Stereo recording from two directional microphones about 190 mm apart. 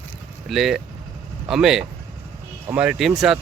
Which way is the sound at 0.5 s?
Centre (ahead or behind).